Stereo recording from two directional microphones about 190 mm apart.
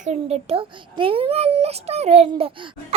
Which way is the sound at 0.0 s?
35° right (ahead or behind).